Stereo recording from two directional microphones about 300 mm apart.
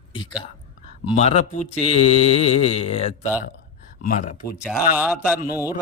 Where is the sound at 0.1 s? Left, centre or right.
Centre.